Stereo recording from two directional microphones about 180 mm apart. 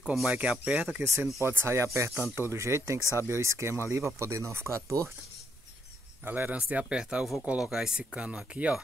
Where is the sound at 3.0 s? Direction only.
15° left (ahead or behind).